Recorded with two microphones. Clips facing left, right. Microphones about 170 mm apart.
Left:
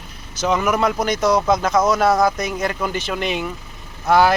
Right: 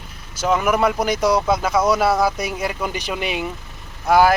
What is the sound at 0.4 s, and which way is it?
Speech, 5° right (ahead or behind).